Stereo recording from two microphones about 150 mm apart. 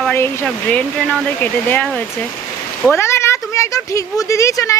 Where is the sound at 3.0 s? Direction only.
15° left (ahead or behind).